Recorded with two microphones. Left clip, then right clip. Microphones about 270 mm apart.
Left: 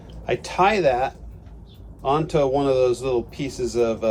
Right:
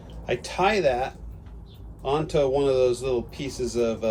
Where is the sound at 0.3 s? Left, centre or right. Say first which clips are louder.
Left 4 dB; centre.